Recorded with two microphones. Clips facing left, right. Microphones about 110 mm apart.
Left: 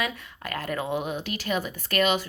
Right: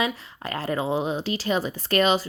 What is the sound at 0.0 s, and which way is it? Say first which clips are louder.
Speech: right 4 dB; 35° right (ahead or behind).